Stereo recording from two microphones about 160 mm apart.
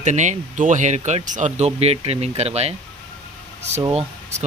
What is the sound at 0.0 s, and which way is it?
Speech, 50° right (ahead or behind).